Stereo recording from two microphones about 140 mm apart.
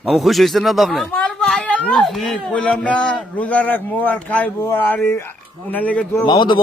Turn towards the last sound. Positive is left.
turn(degrees=35)  # may be behind; listen again after turning